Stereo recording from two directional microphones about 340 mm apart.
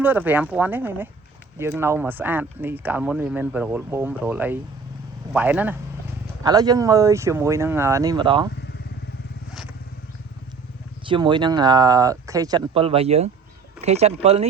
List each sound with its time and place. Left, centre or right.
0.0 s speech: centre
11.0 s speech: centre